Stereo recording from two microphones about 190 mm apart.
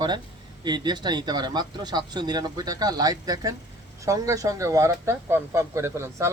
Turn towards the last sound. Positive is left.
turn(degrees=-15)  # may be behind; listen again after turning